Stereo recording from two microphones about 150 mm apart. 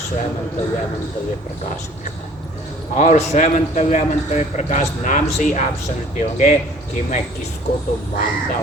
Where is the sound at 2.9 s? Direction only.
55° left (ahead or behind).